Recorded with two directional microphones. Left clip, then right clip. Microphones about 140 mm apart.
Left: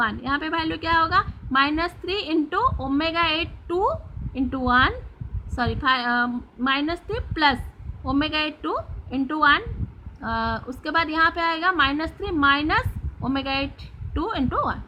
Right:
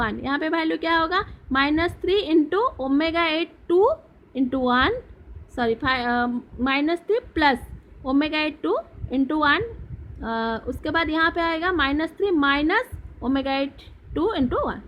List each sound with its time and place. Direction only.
0.0 s a woman's voice: 30° right (ahead or behind)